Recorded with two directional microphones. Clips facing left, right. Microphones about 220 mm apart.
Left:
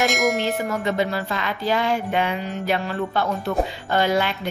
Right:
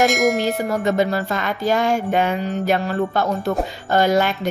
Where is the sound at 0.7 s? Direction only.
45° right (ahead or behind).